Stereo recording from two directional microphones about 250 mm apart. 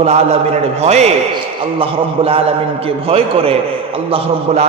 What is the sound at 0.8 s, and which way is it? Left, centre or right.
A man's voice, right.